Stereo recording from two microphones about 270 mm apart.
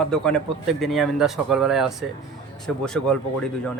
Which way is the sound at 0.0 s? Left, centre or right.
Centre.